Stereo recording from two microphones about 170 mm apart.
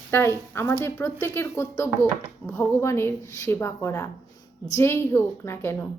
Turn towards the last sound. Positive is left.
turn(degrees=15)  # may be behind; listen again after turning